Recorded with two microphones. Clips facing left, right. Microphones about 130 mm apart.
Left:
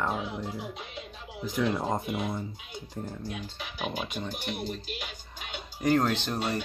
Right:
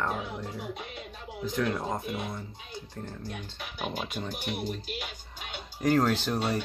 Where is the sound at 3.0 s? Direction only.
5° left (ahead or behind).